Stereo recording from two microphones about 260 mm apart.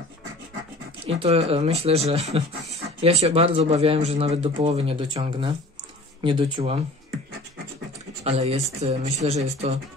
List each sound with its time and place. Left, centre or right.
1.0 s speech: right
8.2 s speech: right